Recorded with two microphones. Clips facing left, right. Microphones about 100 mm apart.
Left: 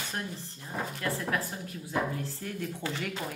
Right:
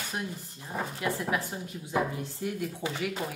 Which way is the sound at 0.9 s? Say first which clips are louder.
Right 2 dB; 15° right (ahead or behind).